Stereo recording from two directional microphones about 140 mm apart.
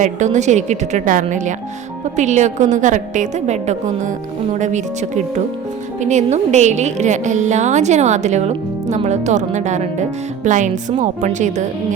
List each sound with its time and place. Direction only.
0.0 s a woman's voice: 55° right (ahead or behind)